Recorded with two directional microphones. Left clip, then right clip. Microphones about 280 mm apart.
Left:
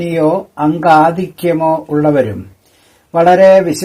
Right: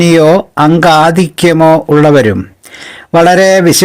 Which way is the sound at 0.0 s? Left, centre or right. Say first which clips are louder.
Right 8 dB; right.